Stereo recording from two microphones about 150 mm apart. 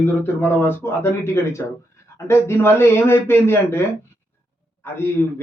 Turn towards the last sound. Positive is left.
turn(degrees=15)  # may be behind; listen again after turning